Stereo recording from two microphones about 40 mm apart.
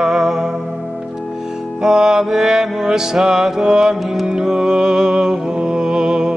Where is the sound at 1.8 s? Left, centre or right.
Centre.